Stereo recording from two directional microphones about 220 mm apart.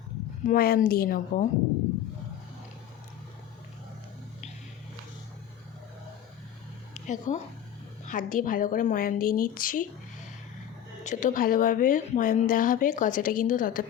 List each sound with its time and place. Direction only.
0.4 s speech: 40° left (ahead or behind)
6.9 s speech: 30° left (ahead or behind)
11.0 s speech: 35° left (ahead or behind)